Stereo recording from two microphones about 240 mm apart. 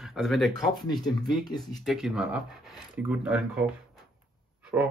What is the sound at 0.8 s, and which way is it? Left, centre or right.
Speech, centre.